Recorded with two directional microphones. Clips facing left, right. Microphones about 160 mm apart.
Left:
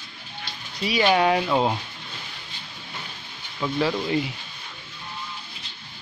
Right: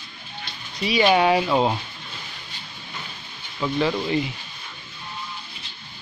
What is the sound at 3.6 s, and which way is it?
Speech, centre (ahead or behind).